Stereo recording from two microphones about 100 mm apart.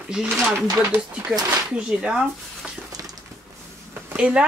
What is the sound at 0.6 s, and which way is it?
Speech, 25° right (ahead or behind).